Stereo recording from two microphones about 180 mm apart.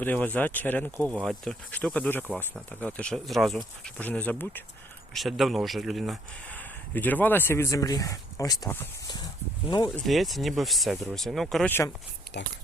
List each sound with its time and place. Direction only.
0.0 s speech: 10° left (ahead or behind)
9.9 s speech: centre (ahead or behind)
12.3 s speech: 70° left (ahead or behind)